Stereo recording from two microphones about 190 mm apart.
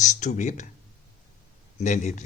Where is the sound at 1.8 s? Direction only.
40° left (ahead or behind).